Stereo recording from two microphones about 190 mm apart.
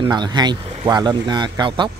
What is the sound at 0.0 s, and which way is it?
Speech, 25° right (ahead or behind).